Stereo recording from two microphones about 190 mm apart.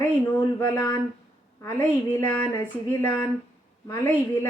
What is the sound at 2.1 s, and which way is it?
A woman's voice, 10° left (ahead or behind).